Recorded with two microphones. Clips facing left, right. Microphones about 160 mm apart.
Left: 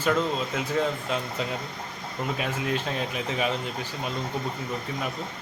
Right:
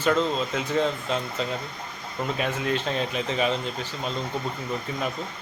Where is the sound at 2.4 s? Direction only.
5° left (ahead or behind).